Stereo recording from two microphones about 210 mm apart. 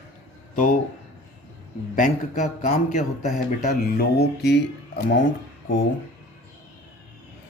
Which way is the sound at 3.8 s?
45° left (ahead or behind).